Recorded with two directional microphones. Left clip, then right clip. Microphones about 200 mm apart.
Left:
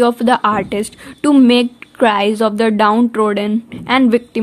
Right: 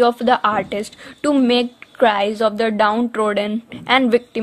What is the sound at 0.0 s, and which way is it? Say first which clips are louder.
A woman's voice: left 2 dB; 5° left (ahead or behind).